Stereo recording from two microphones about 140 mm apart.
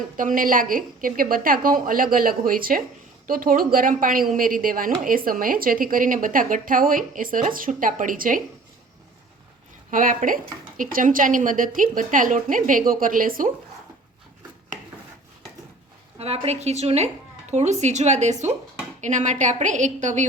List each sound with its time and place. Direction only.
0.2 s speech: 70° right (ahead or behind)
9.9 s a woman's voice: 70° right (ahead or behind)
16.1 s a woman's voice: 45° right (ahead or behind)